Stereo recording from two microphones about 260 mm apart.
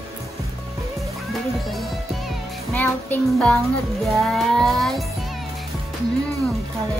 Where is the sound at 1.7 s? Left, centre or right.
Centre.